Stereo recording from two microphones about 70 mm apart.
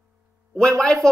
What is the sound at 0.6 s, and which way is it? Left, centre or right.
Speech, centre.